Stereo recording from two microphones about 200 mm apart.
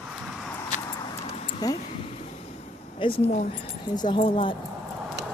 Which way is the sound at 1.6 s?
20° left (ahead or behind).